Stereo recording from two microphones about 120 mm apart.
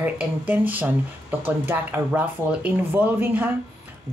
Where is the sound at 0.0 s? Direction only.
15° right (ahead or behind).